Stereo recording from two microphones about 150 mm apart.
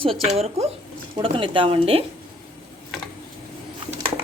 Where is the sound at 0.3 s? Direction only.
45° right (ahead or behind).